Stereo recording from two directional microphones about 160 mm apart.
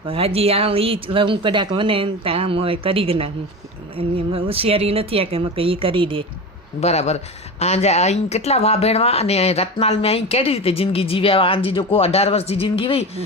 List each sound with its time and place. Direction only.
0.1 s speech: 40° right (ahead or behind)
6.7 s a man's voice: 40° left (ahead or behind)